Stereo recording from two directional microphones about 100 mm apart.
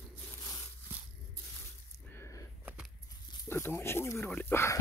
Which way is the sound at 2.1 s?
30° left (ahead or behind).